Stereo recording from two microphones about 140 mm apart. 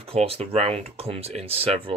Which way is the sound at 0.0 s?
45° right (ahead or behind).